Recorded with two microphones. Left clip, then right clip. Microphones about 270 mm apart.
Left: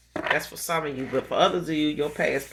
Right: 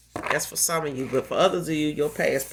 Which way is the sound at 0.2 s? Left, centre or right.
Right.